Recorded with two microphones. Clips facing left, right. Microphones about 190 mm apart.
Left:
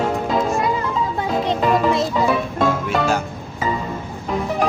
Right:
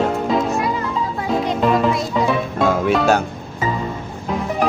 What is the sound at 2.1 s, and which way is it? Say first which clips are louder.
Music: even; centre (ahead or behind).